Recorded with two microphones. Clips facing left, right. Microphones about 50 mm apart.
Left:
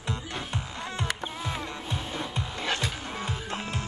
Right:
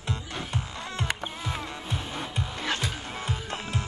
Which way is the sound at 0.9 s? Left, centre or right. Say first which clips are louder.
Even; centre.